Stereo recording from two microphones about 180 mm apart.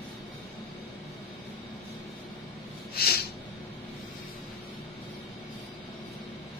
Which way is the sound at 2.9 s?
60° left (ahead or behind).